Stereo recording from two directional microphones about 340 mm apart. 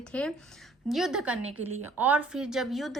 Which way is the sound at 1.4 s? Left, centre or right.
Right.